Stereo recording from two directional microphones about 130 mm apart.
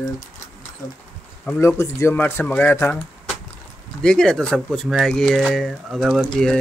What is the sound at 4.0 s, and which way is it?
Speech, 5° left (ahead or behind).